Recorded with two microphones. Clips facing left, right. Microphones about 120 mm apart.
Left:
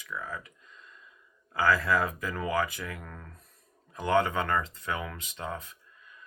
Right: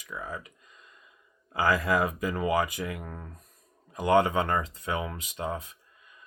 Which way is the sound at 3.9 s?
15° right (ahead or behind).